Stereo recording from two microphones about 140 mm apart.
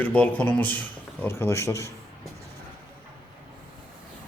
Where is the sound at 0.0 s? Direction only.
10° left (ahead or behind).